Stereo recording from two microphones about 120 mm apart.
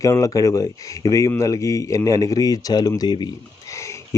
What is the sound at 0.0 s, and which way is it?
Speech, 30° left (ahead or behind).